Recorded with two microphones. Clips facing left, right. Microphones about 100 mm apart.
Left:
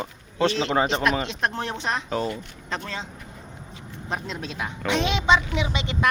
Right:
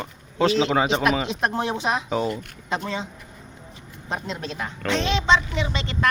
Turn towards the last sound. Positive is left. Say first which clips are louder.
# even
turn(degrees=15)  # may be behind; listen again after turning